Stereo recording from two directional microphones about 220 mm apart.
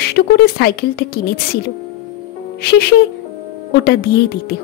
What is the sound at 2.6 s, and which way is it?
Speech, 45° left (ahead or behind).